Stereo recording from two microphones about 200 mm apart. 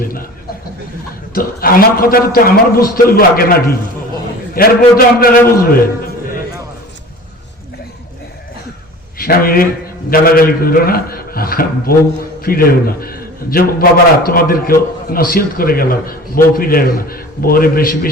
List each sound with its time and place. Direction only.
0.0 s a sound: 45° left (ahead or behind)
1.3 s a man's voice: 45° left (ahead or behind)
9.1 s a man's voice: 45° left (ahead or behind)